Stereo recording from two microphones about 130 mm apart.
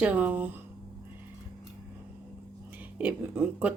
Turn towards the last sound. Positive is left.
turn(degrees=-10)  # may be behind; listen again after turning